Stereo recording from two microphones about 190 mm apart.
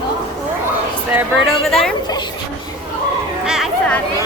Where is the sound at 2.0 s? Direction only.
20° left (ahead or behind).